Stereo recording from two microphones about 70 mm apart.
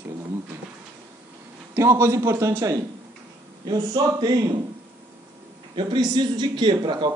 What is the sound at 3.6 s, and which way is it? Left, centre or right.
Speech, right.